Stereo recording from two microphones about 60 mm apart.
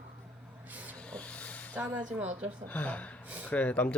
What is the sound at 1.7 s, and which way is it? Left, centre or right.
Speech, right.